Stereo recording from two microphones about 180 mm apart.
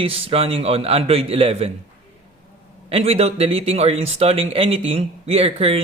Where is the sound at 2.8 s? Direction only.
30° right (ahead or behind).